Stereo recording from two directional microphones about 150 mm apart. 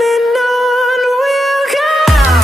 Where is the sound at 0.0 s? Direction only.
Centre (ahead or behind).